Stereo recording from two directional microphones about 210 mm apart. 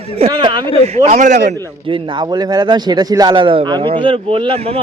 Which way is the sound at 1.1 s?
35° right (ahead or behind).